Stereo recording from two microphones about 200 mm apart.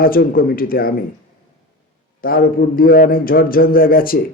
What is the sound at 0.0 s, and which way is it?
Speech, 45° left (ahead or behind).